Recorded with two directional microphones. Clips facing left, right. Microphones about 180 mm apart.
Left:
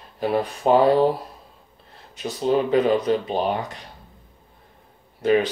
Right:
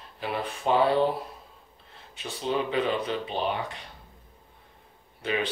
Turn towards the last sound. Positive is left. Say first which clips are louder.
# left 10 dB
turn(degrees=40)  # may be behind; listen again after turning